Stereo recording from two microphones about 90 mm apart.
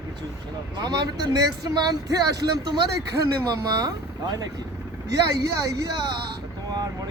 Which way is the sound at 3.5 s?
45° right (ahead or behind).